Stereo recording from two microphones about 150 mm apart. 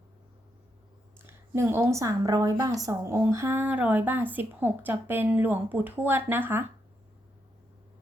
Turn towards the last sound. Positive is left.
turn(degrees=-15)  # may be behind; listen again after turning